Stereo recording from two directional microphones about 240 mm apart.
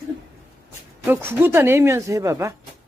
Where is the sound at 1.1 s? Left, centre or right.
Centre.